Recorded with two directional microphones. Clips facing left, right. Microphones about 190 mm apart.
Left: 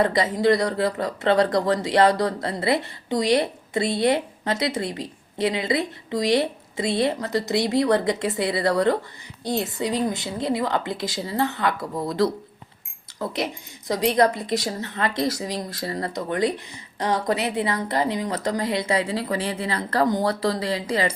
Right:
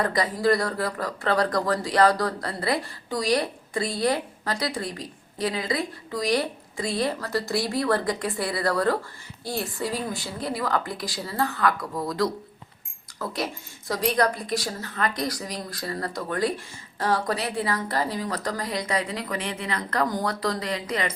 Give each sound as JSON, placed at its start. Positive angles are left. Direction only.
{"t": 0.0, "sound": "speech", "side_deg": 25}
{"t": 13.3, "sound": "speech", "side_deg": 20}